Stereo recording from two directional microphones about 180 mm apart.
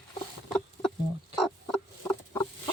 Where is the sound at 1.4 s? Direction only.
Centre (ahead or behind).